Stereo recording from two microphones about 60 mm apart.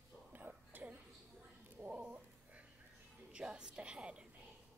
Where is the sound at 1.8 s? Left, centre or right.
Right.